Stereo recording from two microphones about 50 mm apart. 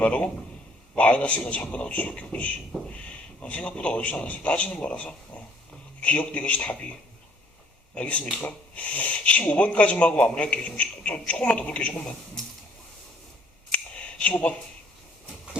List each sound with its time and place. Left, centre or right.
0.9 s speech: left
7.9 s speech: left
13.7 s a sound: left